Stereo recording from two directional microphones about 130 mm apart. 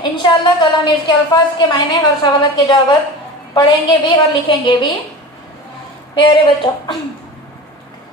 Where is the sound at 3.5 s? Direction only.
35° left (ahead or behind).